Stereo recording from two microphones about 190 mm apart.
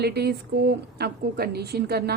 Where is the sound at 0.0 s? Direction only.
60° right (ahead or behind).